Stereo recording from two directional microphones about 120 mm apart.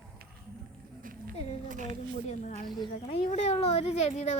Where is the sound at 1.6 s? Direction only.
90° right.